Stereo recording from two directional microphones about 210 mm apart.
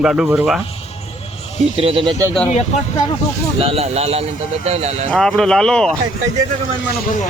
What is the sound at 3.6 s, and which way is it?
Speech, 30° right (ahead or behind).